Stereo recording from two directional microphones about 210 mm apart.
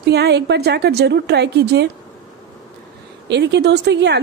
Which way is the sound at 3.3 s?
55° right (ahead or behind).